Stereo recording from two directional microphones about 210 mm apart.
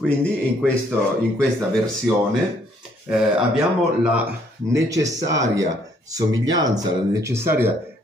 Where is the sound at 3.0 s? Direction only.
5° right (ahead or behind).